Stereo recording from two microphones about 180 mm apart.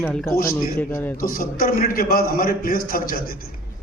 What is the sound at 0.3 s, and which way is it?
A man's voice, 55° left (ahead or behind).